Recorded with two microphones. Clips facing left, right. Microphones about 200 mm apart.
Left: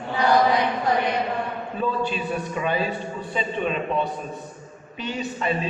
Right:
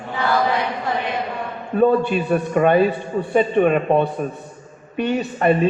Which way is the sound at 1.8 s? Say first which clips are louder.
Right 10 dB; 60° right (ahead or behind).